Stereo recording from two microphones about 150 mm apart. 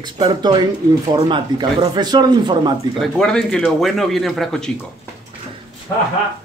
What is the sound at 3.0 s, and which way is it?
Speech, 5° left (ahead or behind).